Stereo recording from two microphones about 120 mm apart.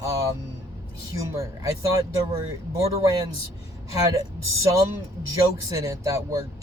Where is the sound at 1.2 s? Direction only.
25° right (ahead or behind).